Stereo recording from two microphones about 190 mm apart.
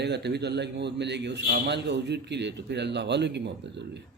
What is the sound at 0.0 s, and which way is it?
Speech, 60° right (ahead or behind).